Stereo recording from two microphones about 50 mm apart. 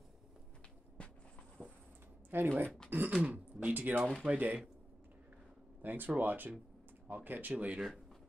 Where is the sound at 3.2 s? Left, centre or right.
Right.